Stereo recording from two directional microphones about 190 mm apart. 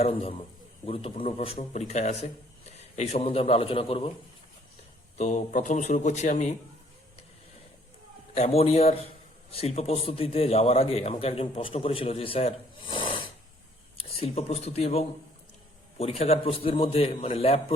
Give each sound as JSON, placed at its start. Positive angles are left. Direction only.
{"t": 0.0, "sound": "a man's voice", "side_deg": 30}
{"t": 5.1, "sound": "a man's voice", "side_deg": 40}
{"t": 8.4, "sound": "a man's voice", "side_deg": 35}